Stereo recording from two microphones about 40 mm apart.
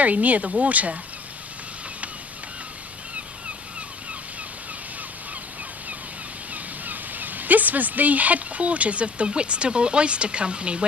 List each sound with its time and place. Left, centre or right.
0.0 s speech: right
6.5 s speech: right